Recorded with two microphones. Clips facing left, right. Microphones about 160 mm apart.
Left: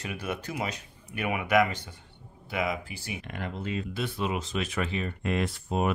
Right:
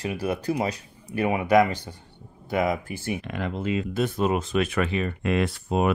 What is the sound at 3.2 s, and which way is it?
Speech, 90° right.